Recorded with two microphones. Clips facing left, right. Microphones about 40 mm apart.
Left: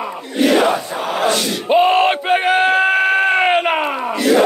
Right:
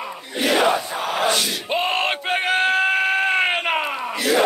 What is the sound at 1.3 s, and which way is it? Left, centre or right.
Yell, centre.